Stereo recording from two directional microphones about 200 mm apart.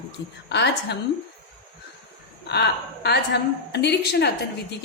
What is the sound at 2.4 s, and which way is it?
A woman's voice, 55° left (ahead or behind).